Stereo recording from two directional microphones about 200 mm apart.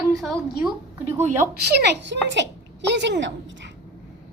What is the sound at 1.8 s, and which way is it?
A woman's voice, 60° right (ahead or behind).